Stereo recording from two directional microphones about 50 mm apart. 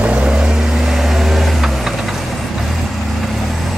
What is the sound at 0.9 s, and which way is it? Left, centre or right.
Vehicle, centre.